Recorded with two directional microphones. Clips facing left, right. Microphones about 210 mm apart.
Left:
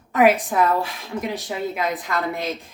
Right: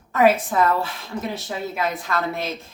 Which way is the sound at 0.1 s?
15° left (ahead or behind).